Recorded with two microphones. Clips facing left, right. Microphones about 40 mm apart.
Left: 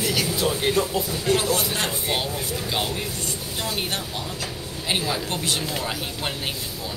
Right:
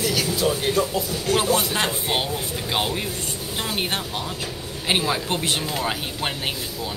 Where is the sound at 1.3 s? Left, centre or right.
Centre.